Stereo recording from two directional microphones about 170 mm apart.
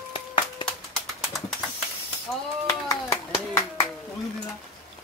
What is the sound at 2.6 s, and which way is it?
Clapping, 20° left (ahead or behind).